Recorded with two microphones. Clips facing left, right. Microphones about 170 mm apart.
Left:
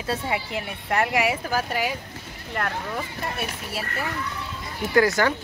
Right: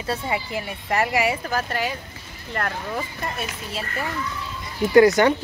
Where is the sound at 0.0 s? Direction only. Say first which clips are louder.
Right 1 dB; centre (ahead or behind).